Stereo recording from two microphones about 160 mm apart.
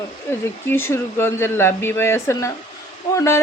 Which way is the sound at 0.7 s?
15° left (ahead or behind).